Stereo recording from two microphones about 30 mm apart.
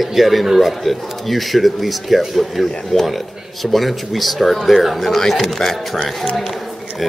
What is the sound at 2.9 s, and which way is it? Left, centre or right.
Speech, centre.